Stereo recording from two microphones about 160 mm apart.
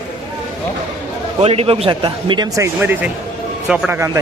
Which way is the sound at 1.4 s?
40° right (ahead or behind).